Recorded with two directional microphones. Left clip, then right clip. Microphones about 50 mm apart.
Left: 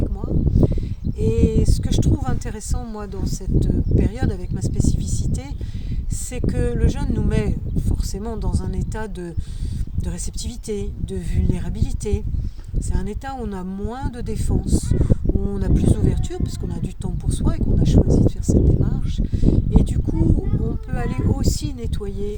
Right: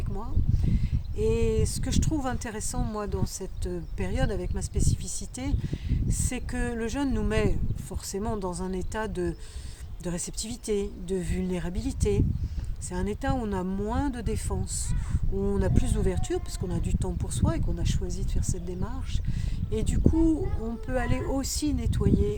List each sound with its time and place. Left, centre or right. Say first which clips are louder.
0.5 s a sound: left 14 dB; right
1.2 s speech: left 4 dB; right
10.7 s speech: even; right